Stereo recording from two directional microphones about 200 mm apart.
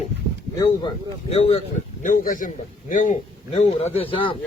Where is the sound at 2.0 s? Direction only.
40° left (ahead or behind); by 4.4 s 25° left (ahead or behind).